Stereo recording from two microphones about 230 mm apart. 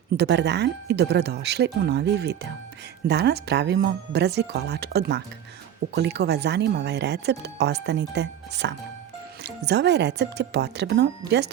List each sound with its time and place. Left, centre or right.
0.2 s speech: right